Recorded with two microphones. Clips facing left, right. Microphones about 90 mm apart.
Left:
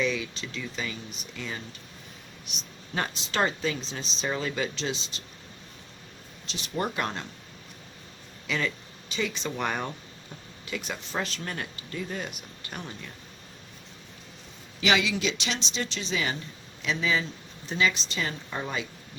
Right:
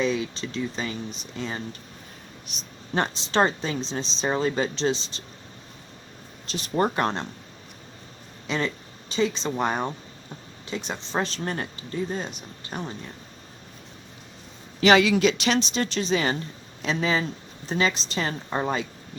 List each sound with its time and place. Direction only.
0.0 s speech: 35° right (ahead or behind)
6.5 s speech: 40° right (ahead or behind)
8.4 s speech: 35° right (ahead or behind)
14.8 s speech: 45° right (ahead or behind)